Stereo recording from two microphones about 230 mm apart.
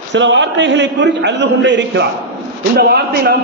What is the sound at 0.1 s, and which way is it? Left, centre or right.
A man's voice, right.